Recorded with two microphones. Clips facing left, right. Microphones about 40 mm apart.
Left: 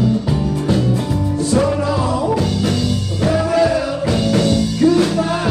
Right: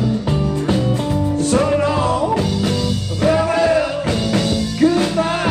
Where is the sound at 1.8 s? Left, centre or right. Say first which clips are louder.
Right 1 dB; right.